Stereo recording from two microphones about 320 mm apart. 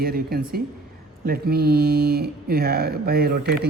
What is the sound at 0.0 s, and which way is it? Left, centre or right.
Speech, right.